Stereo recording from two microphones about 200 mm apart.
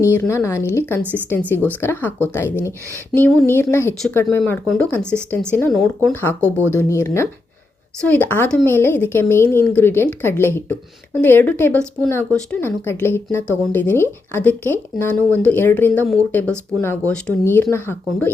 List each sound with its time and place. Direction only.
0.0 s speech: 15° left (ahead or behind)